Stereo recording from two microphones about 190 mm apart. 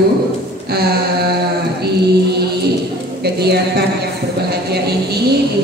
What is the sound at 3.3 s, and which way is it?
Speech, 60° right (ahead or behind).